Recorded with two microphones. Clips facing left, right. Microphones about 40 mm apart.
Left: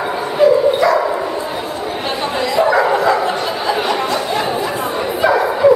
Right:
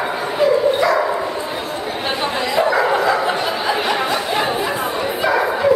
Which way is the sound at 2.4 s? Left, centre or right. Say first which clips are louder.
Left 3 dB; centre.